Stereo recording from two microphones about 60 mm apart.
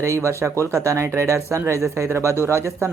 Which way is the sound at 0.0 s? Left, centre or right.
Right.